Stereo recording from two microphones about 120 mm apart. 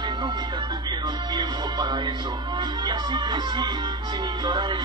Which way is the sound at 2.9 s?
35° right (ahead or behind).